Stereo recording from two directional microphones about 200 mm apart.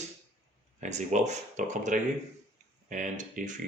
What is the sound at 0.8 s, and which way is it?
Speech, 35° right (ahead or behind).